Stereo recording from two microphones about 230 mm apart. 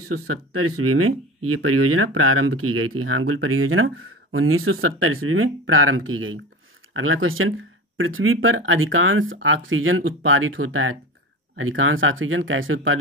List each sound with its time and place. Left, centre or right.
0.1 s speech: right